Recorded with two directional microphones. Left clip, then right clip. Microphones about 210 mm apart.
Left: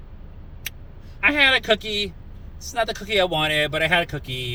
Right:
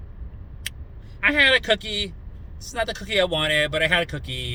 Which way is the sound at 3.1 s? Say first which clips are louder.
Even; 20° right (ahead or behind).